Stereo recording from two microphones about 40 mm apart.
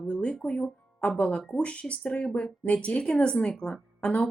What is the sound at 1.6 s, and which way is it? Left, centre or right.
A woman's voice, left.